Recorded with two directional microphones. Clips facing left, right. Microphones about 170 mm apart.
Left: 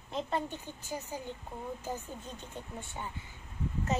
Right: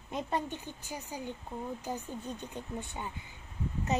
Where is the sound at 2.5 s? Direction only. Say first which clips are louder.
Right 3 dB; 20° right (ahead or behind).